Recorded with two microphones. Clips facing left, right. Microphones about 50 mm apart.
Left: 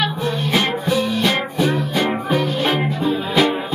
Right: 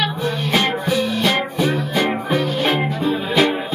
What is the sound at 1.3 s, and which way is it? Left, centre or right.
Music, right.